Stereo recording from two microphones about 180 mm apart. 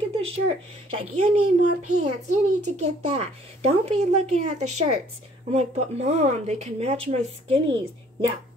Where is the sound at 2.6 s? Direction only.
40° right (ahead or behind).